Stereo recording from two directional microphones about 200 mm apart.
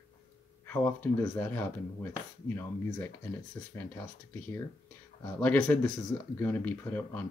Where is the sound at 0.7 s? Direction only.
10° left (ahead or behind).